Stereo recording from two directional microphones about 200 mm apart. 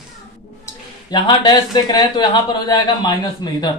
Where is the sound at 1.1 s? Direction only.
20° left (ahead or behind).